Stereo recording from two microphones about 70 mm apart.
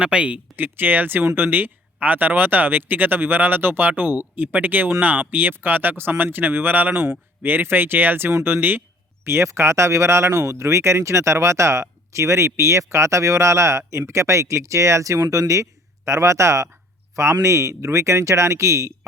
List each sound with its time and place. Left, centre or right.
0.0 s speech: centre
0.5 s speech: right